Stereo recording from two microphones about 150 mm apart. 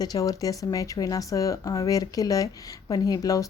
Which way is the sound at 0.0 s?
25° left (ahead or behind).